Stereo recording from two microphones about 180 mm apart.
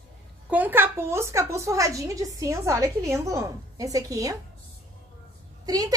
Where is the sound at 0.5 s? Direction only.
10° right (ahead or behind).